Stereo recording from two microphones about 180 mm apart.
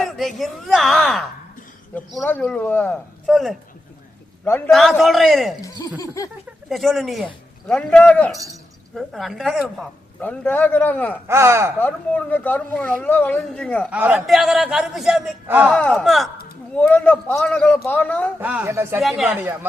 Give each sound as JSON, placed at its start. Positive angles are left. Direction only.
{"t": 0.2, "sound": "a man's voice", "side_deg": 0}
{"t": 4.4, "sound": "a woman's voice", "side_deg": 10}
{"t": 4.7, "sound": "a man's voice", "side_deg": 0}
{"t": 5.6, "sound": "a woman's voice", "side_deg": 20}
{"t": 6.7, "sound": "a man's voice", "side_deg": 0}
{"t": 11.3, "sound": "speech", "side_deg": -15}
{"t": 11.8, "sound": "a woman's voice", "side_deg": 10}
{"t": 13.9, "sound": "a man's voice", "side_deg": -10}
{"t": 15.7, "sound": "a man's voice", "side_deg": 5}
{"t": 18.3, "sound": "speech", "side_deg": -10}
{"t": 19.0, "sound": "a man's voice", "side_deg": 0}